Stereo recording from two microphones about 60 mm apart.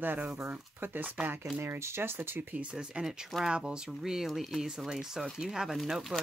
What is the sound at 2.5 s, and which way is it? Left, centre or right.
Speech, centre.